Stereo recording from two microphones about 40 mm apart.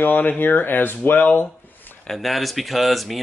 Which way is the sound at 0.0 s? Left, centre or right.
Left.